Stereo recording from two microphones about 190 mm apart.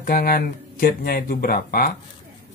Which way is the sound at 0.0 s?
50° left (ahead or behind).